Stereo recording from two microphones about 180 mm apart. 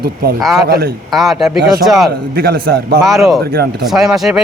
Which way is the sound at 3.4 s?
60° right (ahead or behind).